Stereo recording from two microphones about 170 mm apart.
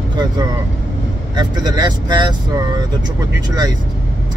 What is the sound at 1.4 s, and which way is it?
Speech, 25° right (ahead or behind).